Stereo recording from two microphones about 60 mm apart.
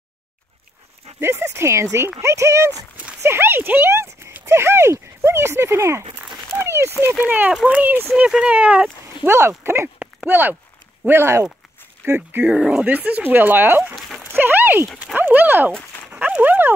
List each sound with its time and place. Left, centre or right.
1.2 s speech: right
3.2 s speech: right
6.5 s a sound: right
7.2 s speech: right
8.3 s speech: centre
9.2 s speech: right
9.9 s a sound: right
11.1 s speech: right
12.4 s speech: centre
12.8 s speech: right
13.9 s a sound: centre
14.3 s dog: right
15.1 s speech: right